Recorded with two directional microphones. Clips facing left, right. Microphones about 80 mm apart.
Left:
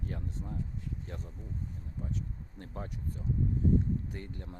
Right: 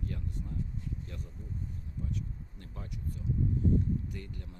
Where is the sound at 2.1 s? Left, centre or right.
Left.